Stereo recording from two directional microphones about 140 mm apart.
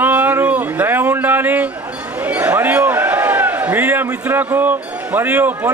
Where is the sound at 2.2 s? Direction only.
10° right (ahead or behind).